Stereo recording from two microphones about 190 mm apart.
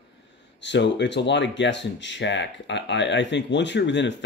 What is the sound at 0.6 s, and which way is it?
Speech, 70° left (ahead or behind).